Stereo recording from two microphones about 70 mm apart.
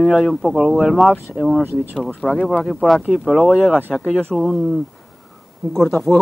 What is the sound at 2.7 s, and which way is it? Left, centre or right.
Speech, centre.